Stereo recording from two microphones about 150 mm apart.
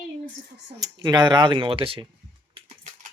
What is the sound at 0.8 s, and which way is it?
Speech, 25° right (ahead or behind).